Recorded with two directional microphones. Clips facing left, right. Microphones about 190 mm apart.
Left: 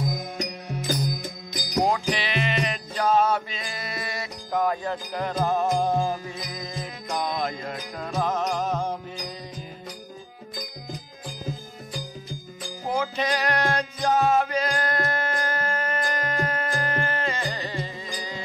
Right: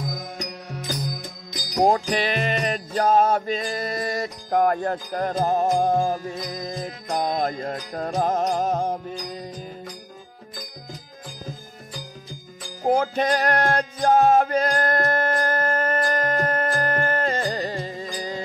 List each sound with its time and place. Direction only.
1.9 s music: 45° right (ahead or behind)
12.8 s music: 55° right (ahead or behind)